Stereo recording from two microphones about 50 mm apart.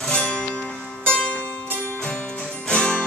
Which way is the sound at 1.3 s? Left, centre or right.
Left.